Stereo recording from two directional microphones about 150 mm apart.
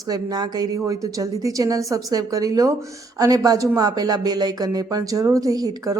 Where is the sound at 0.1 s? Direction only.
25° right (ahead or behind).